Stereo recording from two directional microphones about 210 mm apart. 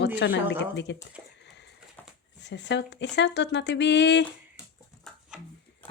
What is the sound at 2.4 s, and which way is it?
Speech, 55° left (ahead or behind).